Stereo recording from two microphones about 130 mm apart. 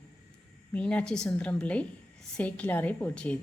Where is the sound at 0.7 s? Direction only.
10° left (ahead or behind).